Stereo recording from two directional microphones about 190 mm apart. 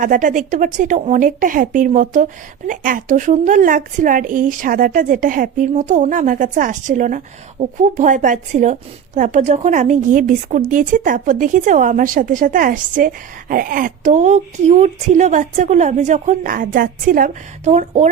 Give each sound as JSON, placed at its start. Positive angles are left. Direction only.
{"t": 0.0, "sound": "a woman's voice", "side_deg": -45}